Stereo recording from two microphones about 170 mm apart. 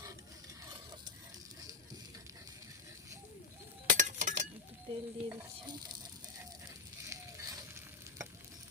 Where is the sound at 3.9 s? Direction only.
45° right (ahead or behind).